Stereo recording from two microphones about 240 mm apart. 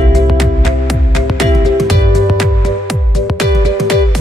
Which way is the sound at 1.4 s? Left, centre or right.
Centre.